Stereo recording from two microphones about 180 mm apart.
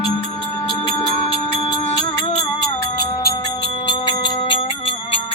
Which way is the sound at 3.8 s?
25° left (ahead or behind).